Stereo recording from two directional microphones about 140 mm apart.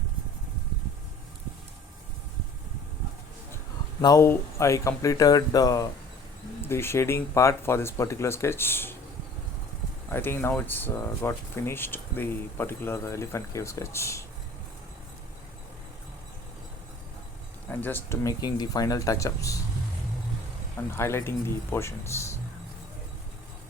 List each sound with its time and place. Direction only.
4.0 s speech: 25° left (ahead or behind)
10.1 s speech: 15° left (ahead or behind)
17.7 s speech: 15° left (ahead or behind)
20.9 s speech: 20° left (ahead or behind)